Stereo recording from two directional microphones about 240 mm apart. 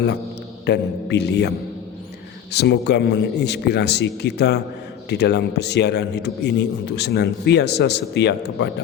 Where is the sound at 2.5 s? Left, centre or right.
Left.